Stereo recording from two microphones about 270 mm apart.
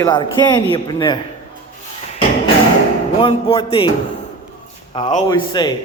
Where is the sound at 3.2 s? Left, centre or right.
Centre.